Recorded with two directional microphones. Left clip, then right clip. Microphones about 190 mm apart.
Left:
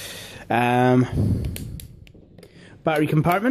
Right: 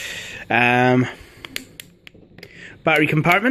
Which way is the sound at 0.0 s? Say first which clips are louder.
Right 6 dB; 10° left (ahead or behind).